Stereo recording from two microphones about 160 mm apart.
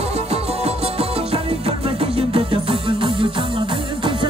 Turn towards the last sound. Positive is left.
turn(degrees=-35)  # may be behind; listen again after turning